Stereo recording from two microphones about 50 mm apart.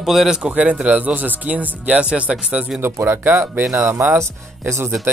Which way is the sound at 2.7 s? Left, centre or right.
Right.